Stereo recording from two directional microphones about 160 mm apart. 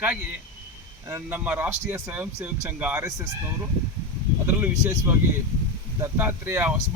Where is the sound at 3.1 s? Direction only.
20° right (ahead or behind).